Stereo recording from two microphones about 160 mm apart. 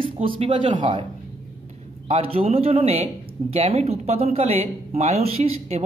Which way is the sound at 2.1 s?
35° right (ahead or behind).